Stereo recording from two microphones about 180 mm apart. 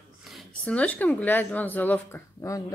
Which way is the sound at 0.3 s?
5° left (ahead or behind).